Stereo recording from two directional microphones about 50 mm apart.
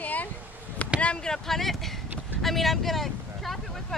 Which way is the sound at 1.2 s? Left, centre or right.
Centre.